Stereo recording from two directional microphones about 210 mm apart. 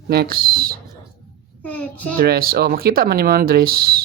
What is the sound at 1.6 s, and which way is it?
Speech, 5° left (ahead or behind).